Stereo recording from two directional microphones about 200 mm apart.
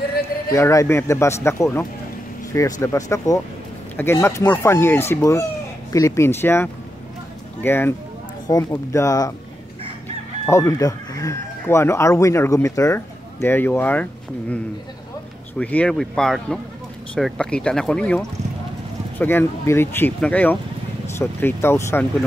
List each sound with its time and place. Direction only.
0.5 s speech: 15° left (ahead or behind)
10.4 s speech: 15° left (ahead or behind)
15.5 s speech: 5° left (ahead or behind)